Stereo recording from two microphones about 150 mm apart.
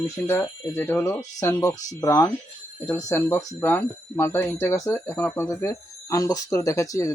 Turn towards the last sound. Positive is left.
turn(degrees=20)  # may be behind; listen again after turning